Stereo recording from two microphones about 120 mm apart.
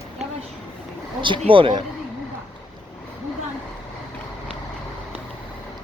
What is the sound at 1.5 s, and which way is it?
Speech, 45° right (ahead or behind).